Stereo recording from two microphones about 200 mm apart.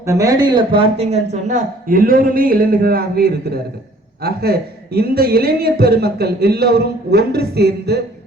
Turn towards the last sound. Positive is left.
turn(degrees=-55)  # may be behind; listen again after turning